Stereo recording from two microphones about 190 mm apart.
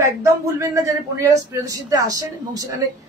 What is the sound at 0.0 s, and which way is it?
A woman's voice, 15° right (ahead or behind).